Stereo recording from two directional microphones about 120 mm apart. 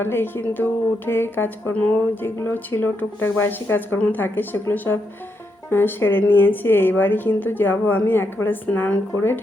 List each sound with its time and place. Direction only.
0.0 s a woman's voice: 20° left (ahead or behind)